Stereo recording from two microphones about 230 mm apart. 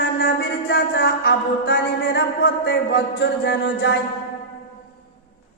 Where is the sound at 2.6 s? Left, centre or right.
Left.